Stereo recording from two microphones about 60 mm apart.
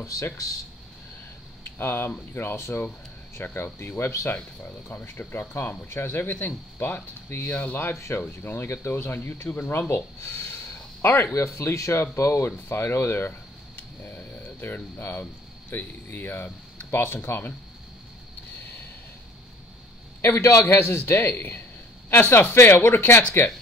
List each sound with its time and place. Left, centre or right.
0.0 s speech: left
1.6 s speech: left
7.9 s speech: left
11.3 s speech: left
13.3 s a sound: left
15.7 s speech: left
20.2 s a man's voice: left